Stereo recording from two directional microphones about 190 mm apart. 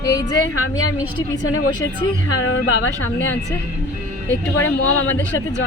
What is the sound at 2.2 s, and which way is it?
A woman's voice, 90° left.